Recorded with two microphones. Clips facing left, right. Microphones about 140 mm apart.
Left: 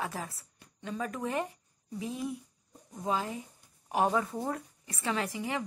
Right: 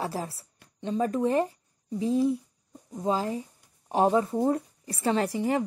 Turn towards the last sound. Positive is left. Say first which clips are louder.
# right 8 dB
turn(degrees=-40)  # may be behind; listen again after turning